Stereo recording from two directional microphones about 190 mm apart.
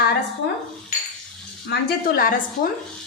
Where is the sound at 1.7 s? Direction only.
60° left (ahead or behind).